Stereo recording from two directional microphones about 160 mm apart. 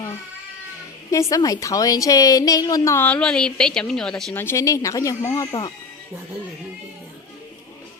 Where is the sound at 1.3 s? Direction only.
20° left (ahead or behind).